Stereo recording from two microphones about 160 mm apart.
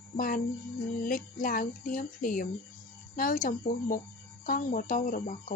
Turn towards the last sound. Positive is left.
turn(degrees=55)  # may be behind; listen again after turning